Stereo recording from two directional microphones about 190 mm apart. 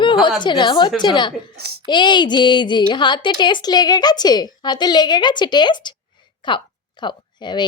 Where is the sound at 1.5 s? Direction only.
55° right (ahead or behind).